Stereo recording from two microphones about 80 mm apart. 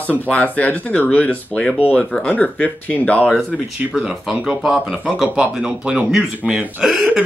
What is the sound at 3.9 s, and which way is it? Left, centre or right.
Speech, centre.